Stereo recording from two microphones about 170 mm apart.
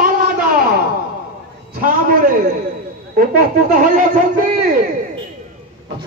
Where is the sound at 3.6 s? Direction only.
55° right (ahead or behind).